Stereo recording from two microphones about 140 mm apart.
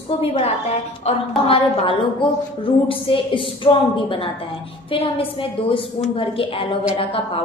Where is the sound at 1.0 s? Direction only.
45° left (ahead or behind).